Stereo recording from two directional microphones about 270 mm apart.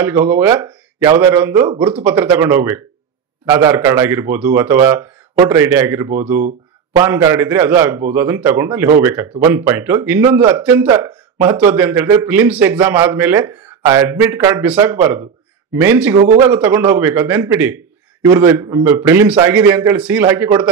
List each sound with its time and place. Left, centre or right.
0.0 s speech: centre
16.2 s speech: centre